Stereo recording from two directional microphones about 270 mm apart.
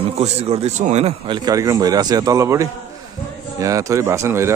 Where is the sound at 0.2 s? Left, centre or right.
Right.